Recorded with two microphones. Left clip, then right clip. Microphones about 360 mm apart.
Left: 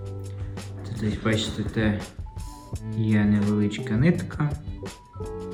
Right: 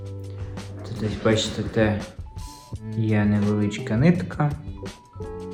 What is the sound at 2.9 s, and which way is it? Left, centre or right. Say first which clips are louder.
Speech: right 1 dB; centre.